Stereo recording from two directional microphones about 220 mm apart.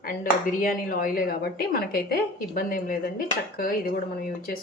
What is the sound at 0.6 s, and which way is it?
A woman's voice, 40° left (ahead or behind).